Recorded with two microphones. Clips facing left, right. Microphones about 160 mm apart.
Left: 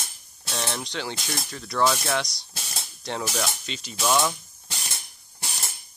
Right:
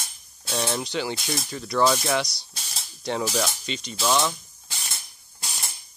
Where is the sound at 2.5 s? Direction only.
60° left (ahead or behind).